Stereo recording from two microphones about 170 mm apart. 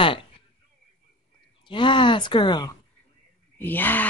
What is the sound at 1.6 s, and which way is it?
Speech, 30° left (ahead or behind).